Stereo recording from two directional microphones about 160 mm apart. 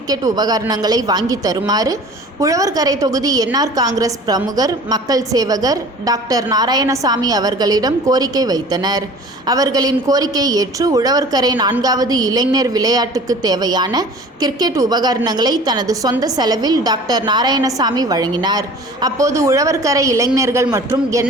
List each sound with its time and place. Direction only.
0.1 s a woman's voice: 25° right (ahead or behind)